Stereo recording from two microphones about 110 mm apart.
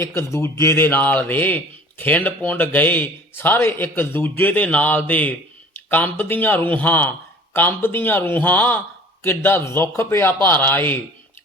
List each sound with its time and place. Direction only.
0.0 s speech: 25° left (ahead or behind)